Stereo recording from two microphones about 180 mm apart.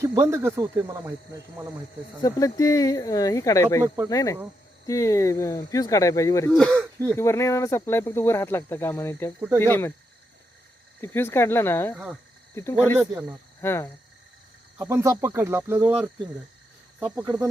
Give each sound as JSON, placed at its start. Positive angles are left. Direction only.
{"t": 0.0, "sound": "speech", "side_deg": -15}
{"t": 2.2, "sound": "speech", "side_deg": 20}
{"t": 3.8, "sound": "speech", "side_deg": -10}
{"t": 4.1, "sound": "speech", "side_deg": 20}
{"t": 6.5, "sound": "speech", "side_deg": 5}
{"t": 6.7, "sound": "speech", "side_deg": -15}
{"t": 7.2, "sound": "speech", "side_deg": 15}
{"t": 11.0, "sound": "speech", "side_deg": 15}
{"t": 14.8, "sound": "speech", "side_deg": -15}